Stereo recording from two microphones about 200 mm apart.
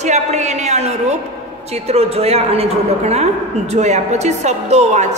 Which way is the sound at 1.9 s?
30° right (ahead or behind).